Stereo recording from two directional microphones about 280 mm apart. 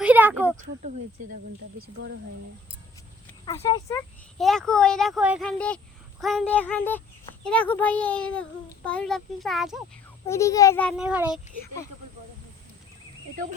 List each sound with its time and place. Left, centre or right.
0.0 s a sound: centre
0.6 s speech: right
3.4 s speech: centre
10.2 s speech: centre